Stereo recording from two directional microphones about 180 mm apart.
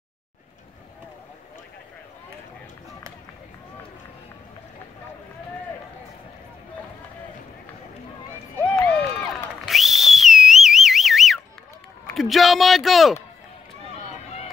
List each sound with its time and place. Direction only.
8.5 s crowd: 5° left (ahead or behind)
9.7 s whistle: centre (ahead or behind)
12.1 s a man's voice: centre (ahead or behind)
14.1 s run: 35° left (ahead or behind)